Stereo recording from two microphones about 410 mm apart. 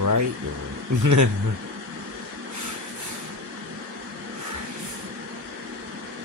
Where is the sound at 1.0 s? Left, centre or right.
Right.